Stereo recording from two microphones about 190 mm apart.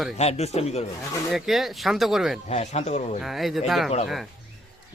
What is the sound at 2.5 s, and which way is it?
Speech, 35° left (ahead or behind).